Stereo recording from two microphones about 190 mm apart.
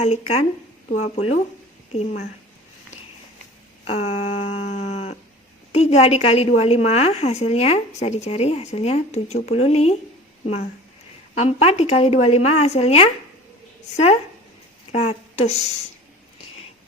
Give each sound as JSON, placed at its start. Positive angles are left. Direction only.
{"t": 0.0, "sound": "a woman's voice", "side_deg": 35}
{"t": 3.8, "sound": "a woman's voice", "side_deg": 35}
{"t": 4.6, "sound": "livestock", "side_deg": 35}
{"t": 5.7, "sound": "a woman's voice", "side_deg": 35}